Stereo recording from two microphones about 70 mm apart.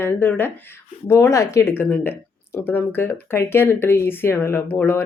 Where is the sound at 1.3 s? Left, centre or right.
Left.